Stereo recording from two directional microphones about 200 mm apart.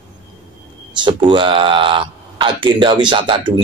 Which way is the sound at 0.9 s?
25° right (ahead or behind).